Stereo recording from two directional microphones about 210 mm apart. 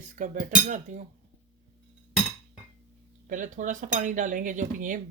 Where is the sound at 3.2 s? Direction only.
40° right (ahead or behind).